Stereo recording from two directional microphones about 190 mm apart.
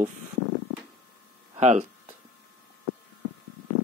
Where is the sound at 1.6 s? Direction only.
35° right (ahead or behind).